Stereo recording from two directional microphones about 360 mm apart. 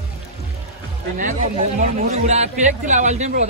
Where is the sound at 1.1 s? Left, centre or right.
Centre.